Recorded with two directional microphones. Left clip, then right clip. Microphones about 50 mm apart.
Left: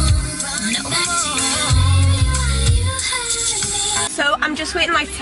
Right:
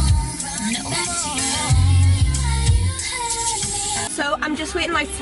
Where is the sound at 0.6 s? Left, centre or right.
Right.